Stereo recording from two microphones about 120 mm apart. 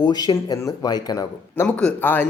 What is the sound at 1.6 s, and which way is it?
Speech, 10° left (ahead or behind).